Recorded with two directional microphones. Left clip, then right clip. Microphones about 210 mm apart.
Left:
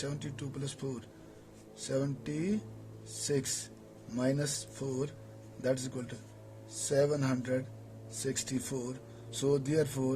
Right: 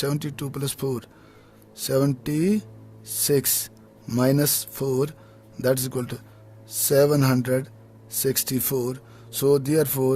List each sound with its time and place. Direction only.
0.0 s speech: 50° right (ahead or behind)